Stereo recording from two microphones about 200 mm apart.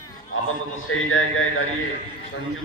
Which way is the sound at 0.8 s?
90° left.